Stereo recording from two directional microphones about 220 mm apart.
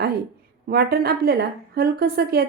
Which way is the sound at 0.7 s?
45° right (ahead or behind).